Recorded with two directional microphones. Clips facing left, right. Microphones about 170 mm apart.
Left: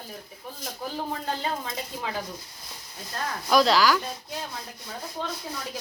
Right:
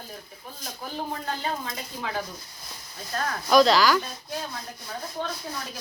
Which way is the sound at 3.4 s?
5° left (ahead or behind).